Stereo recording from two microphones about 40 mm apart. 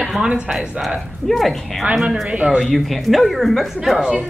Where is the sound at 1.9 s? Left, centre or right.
Centre.